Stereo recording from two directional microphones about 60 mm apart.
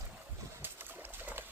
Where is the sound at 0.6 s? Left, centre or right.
Right.